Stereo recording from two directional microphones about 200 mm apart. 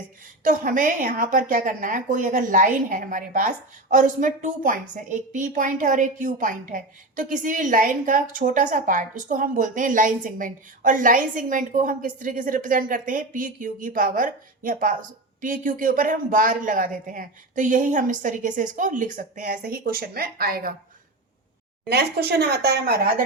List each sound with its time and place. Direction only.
0.4 s a woman's voice: 40° right (ahead or behind)
21.8 s a woman's voice: 55° right (ahead or behind)